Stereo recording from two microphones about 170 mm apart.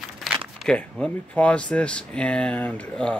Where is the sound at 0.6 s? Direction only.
5° left (ahead or behind).